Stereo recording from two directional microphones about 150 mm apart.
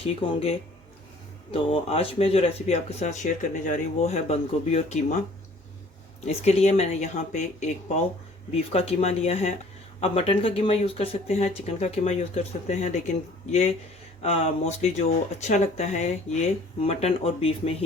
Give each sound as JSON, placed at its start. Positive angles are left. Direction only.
{"t": 0.2, "sound": "speech", "side_deg": 40}
{"t": 6.2, "sound": "speech", "side_deg": 45}
{"t": 8.7, "sound": "speech", "side_deg": 45}